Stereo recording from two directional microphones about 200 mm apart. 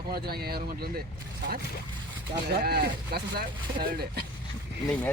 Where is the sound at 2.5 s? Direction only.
50° right (ahead or behind).